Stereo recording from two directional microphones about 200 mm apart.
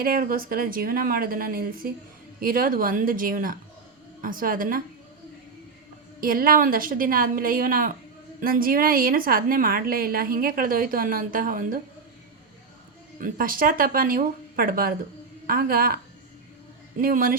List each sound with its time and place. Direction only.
0.0 s a woman's voice: 45° right (ahead or behind)
6.1 s a woman's voice: 45° right (ahead or behind)
13.1 s a woman's voice: 45° right (ahead or behind)
17.0 s a woman's voice: 45° right (ahead or behind)